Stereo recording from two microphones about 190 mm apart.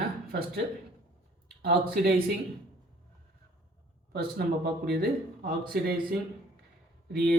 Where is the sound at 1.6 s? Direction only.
55° right (ahead or behind).